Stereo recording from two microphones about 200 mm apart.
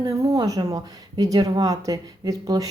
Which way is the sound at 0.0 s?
20° right (ahead or behind).